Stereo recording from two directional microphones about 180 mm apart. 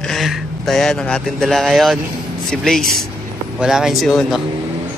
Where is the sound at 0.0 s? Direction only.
Centre (ahead or behind).